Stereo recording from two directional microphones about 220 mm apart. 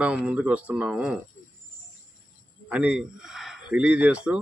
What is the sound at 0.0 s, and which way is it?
A man's voice, 5° right (ahead or behind).